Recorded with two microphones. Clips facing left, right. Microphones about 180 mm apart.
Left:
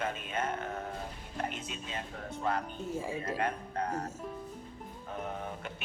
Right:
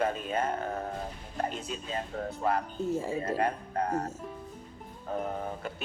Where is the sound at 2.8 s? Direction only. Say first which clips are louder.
Right 6 dB; 10° left (ahead or behind).